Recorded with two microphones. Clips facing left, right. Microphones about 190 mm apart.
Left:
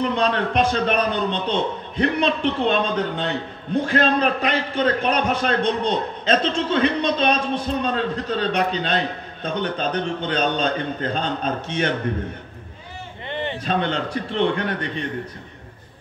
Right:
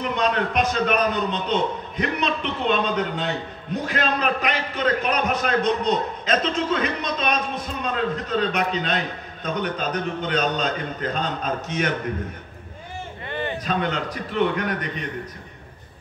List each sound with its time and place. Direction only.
0.0 s a man's voice: 30° left (ahead or behind)
3.7 s a man's voice: 30° left (ahead or behind)
13.3 s a man's voice: 25° left (ahead or behind)